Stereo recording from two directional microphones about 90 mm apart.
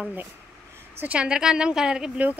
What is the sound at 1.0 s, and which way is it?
Speech, 15° right (ahead or behind).